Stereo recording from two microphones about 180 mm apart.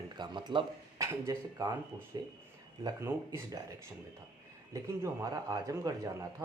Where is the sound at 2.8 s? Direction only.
15° right (ahead or behind).